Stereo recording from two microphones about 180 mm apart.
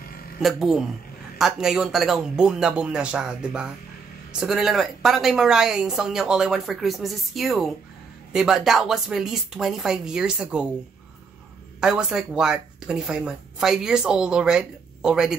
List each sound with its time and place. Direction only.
0.4 s speech: centre (ahead or behind)
11.8 s speech: 5° right (ahead or behind)